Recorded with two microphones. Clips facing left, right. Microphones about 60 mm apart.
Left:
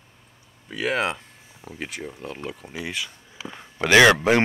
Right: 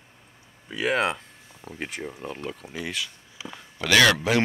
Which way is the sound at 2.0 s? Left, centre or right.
Centre.